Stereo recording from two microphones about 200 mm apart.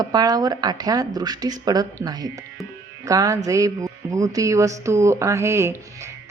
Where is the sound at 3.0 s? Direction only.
15° right (ahead or behind).